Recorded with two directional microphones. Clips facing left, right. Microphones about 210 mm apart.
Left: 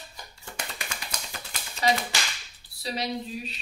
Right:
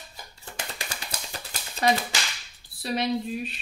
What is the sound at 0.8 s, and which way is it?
Music, 35° right (ahead or behind).